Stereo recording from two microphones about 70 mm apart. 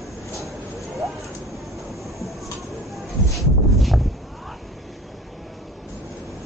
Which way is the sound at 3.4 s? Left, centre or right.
Centre.